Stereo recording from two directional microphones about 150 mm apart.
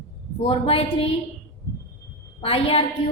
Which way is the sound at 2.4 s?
40° left (ahead or behind).